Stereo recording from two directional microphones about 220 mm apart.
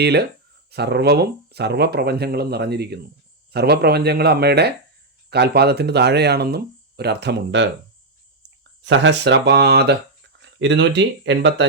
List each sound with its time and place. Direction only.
0.0 s speech: 50° right (ahead or behind)
8.8 s speech: 55° right (ahead or behind)